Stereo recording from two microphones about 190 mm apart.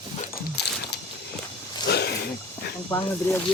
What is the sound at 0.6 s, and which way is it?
Dog, 60° left (ahead or behind).